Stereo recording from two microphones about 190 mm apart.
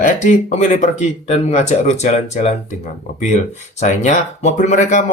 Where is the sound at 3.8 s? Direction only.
40° left (ahead or behind).